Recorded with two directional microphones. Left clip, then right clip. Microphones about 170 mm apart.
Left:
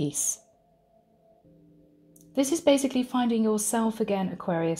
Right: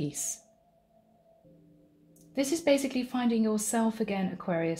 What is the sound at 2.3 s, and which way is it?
Speech, 35° left (ahead or behind).